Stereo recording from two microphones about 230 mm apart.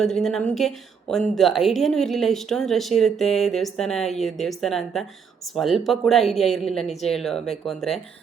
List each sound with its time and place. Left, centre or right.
0.0 s a woman's voice: centre